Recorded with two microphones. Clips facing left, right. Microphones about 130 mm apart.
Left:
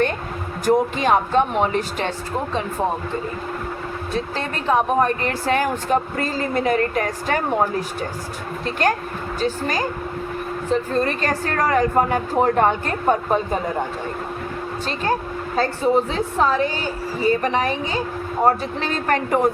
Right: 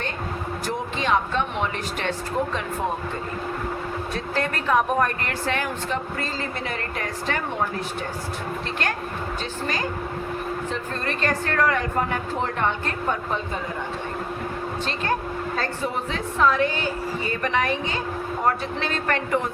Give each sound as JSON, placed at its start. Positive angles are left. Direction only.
{"t": 0.6, "sound": "a woman's voice", "side_deg": 45}
{"t": 4.1, "sound": "a woman's voice", "side_deg": 30}
{"t": 9.4, "sound": "a woman's voice", "side_deg": 40}
{"t": 15.5, "sound": "a woman's voice", "side_deg": 35}